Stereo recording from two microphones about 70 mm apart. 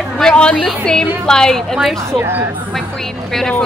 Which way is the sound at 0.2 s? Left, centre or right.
Centre.